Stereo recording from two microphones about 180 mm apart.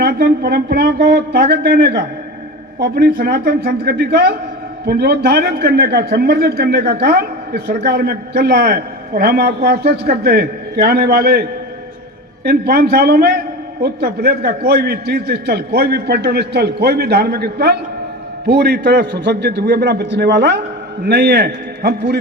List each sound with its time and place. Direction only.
0.0 s a man's voice: 60° right (ahead or behind)
12.5 s a man's voice: 60° right (ahead or behind)